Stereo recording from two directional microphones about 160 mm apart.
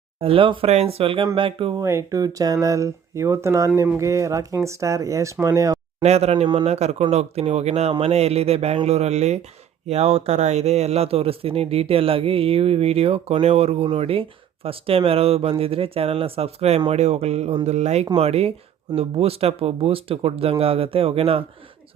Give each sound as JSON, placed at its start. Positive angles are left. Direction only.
{"t": 0.2, "sound": "speech", "side_deg": -35}
{"t": 1.8, "sound": "speech", "side_deg": -20}
{"t": 6.0, "sound": "speech", "side_deg": -40}
{"t": 6.7, "sound": "speech", "side_deg": -40}